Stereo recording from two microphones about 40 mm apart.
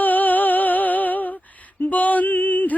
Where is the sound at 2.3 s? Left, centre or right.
Left.